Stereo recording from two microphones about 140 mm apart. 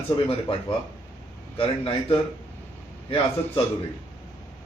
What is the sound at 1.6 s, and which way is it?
Speech, 40° left (ahead or behind).